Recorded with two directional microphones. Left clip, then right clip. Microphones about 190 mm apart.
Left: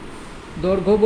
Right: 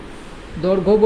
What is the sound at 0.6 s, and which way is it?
Music, 20° right (ahead or behind).